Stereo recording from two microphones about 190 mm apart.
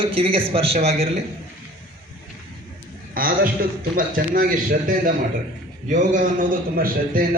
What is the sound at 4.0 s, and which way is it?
A man's voice, 45° right (ahead or behind).